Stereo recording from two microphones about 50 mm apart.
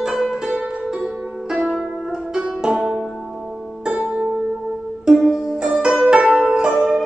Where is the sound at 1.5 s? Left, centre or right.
Centre.